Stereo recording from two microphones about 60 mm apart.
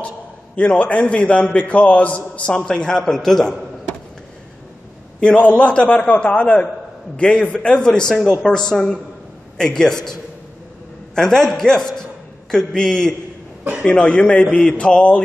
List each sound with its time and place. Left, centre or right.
0.6 s a man's voice: left
5.2 s a man's voice: left
11.1 s speech: centre